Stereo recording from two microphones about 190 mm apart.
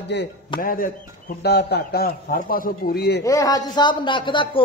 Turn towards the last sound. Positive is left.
turn(degrees=25)  # may be behind; listen again after turning